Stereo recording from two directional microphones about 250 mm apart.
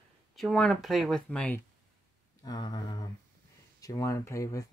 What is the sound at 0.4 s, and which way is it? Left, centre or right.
Speech, centre.